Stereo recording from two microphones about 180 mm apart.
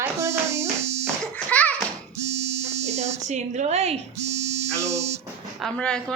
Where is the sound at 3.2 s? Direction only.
40° right (ahead or behind).